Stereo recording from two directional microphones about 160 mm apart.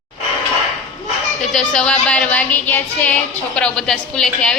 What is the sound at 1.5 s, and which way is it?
Music, 5° left (ahead or behind).